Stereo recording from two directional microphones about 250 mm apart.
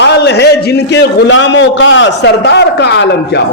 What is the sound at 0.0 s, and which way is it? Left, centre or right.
A man's voice, left.